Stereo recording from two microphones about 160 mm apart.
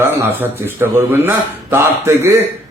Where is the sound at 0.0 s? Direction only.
15° right (ahead or behind).